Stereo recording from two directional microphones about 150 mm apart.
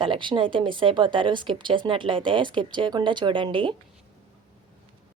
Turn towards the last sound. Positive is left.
turn(degrees=-35)  # may be behind; listen again after turning